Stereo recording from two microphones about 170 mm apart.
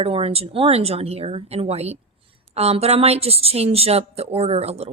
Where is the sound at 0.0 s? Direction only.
35° right (ahead or behind).